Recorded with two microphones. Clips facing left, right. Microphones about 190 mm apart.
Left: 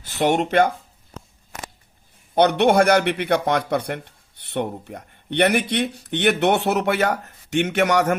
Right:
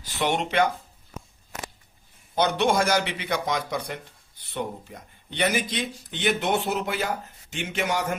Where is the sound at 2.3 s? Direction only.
60° left (ahead or behind).